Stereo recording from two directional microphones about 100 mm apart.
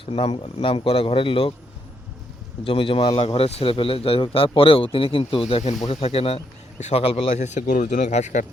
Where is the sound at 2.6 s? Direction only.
60° left (ahead or behind).